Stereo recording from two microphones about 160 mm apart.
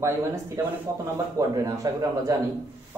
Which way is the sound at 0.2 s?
15° right (ahead or behind).